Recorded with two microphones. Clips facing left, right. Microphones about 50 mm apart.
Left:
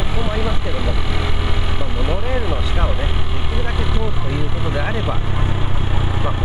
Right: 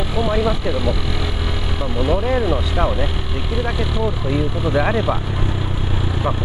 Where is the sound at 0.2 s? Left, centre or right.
Centre.